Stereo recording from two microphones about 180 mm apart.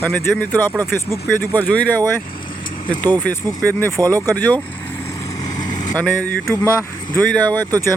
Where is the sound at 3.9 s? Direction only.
20° right (ahead or behind).